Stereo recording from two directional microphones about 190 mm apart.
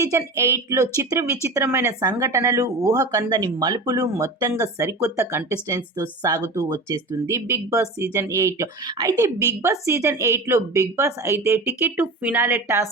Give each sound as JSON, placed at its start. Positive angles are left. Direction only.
{"t": 0.0, "sound": "speech", "side_deg": -15}